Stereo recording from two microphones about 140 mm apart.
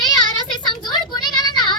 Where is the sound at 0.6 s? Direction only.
30° left (ahead or behind).